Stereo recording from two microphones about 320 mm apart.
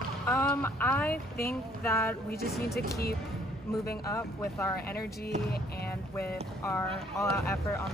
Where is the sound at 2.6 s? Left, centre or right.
Left.